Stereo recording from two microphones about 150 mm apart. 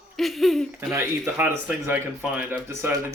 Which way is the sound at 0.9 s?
15° right (ahead or behind).